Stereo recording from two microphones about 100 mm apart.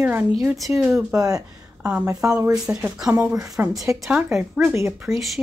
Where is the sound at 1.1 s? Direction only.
35° right (ahead or behind).